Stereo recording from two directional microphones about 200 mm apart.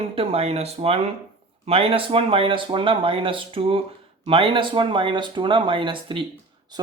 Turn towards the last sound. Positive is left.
turn(degrees=-25)  # may be behind; listen again after turning